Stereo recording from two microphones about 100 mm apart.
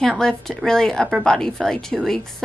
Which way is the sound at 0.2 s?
5° left (ahead or behind).